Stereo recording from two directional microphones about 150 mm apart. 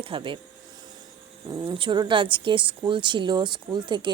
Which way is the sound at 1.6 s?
35° right (ahead or behind).